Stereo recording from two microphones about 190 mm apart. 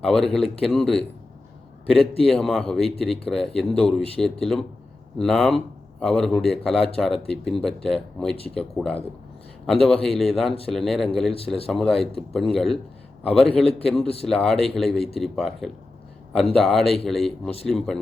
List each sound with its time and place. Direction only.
0.0 s a man's voice: 5° left (ahead or behind)
2.2 s a man's voice: centre (ahead or behind)
11.3 s a man's voice: 30° left (ahead or behind)
11.7 s a man's voice: centre (ahead or behind)
14.0 s a man's voice: 30° left (ahead or behind)
14.3 s a man's voice: 5° left (ahead or behind)